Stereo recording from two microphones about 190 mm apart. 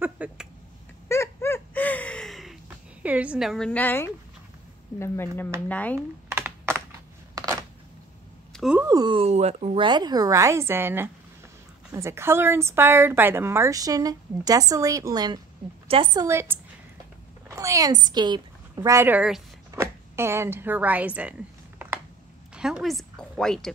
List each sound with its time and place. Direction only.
0.0 s a sound: 5° right (ahead or behind)
1.0 s gasp: 15° left (ahead or behind)
3.0 s a woman's voice: 5° right (ahead or behind)
5.9 s computer keyboard: 10° right (ahead or behind)
8.5 s a sound: 5° right (ahead or behind)
8.8 s speech: 20° right (ahead or behind)
9.8 s a woman's voice: 20° right (ahead or behind); by 19.4 s 5° right (ahead or behind)
19.7 s a sound: 15° right (ahead or behind)
22.5 s a woman's voice: 5° right (ahead or behind)